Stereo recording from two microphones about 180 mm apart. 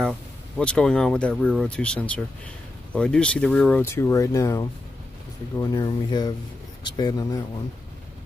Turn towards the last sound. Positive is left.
turn(degrees=20)  # may be behind; listen again after turning